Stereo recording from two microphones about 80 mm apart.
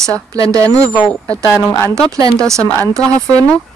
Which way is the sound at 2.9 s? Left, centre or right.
Right.